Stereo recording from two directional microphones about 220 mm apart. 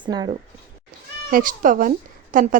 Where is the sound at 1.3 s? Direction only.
40° right (ahead or behind).